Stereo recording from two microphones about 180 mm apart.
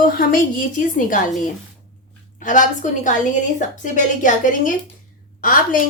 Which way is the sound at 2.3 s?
45° left (ahead or behind).